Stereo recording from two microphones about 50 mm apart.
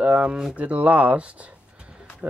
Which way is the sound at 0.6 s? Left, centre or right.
Right.